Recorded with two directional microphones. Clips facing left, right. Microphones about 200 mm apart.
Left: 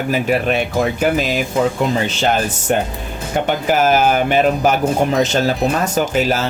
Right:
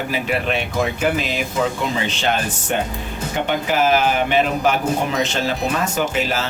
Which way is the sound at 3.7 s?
45° left (ahead or behind).